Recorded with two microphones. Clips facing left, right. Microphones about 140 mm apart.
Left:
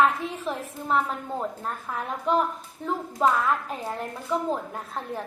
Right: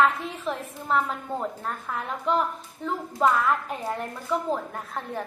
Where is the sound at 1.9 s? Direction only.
20° left (ahead or behind).